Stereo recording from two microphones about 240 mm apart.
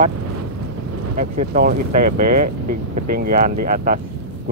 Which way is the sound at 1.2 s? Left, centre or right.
Right.